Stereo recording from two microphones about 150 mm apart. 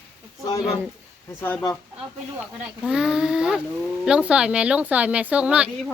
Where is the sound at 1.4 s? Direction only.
15° left (ahead or behind).